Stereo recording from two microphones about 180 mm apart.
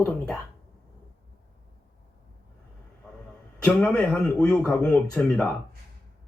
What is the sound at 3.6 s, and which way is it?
A woman's voice, 5° left (ahead or behind).